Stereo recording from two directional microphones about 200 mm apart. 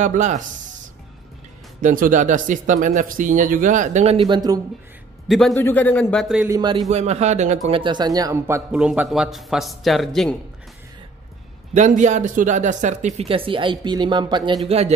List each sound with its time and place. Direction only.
0.0 s speech: 35° right (ahead or behind)
1.8 s speech: 40° right (ahead or behind); by 4.6 s 20° right (ahead or behind)
5.3 s a man's voice: 5° left (ahead or behind)
6.5 s a man's voice: 20° right (ahead or behind)
6.9 s speech: 35° right (ahead or behind)
7.8 s a man's voice: 20° right (ahead or behind); by 10.3 s centre (ahead or behind)
11.7 s speech: 35° right (ahead or behind)